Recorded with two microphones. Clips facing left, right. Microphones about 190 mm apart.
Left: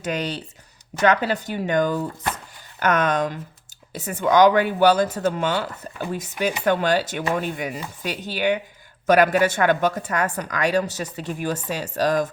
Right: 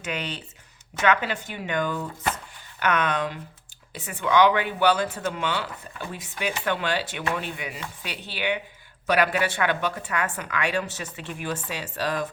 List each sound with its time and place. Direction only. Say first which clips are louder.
0.0 s a woman's voice: left 6 dB; 40° left (ahead or behind)